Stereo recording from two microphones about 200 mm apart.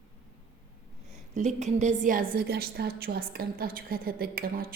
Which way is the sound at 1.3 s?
35° right (ahead or behind).